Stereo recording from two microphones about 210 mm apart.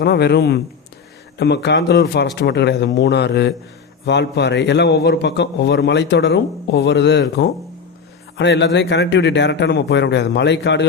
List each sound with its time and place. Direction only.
0.0 s a man's voice: 50° left (ahead or behind)